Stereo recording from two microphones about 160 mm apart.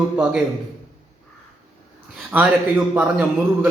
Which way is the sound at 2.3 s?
10° right (ahead or behind).